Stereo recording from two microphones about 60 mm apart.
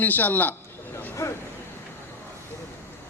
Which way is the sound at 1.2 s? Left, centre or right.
Left.